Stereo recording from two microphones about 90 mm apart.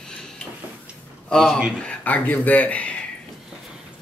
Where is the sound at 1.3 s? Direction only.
5° left (ahead or behind).